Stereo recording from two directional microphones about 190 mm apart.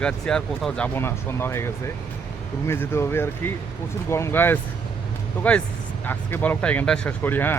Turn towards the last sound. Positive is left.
turn(degrees=10)  # may be behind; listen again after turning